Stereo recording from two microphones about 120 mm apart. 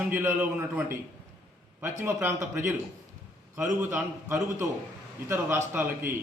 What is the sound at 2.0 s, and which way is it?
Speech, 20° right (ahead or behind).